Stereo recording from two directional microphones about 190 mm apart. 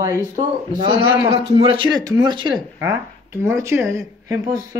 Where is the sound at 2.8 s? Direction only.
10° right (ahead or behind).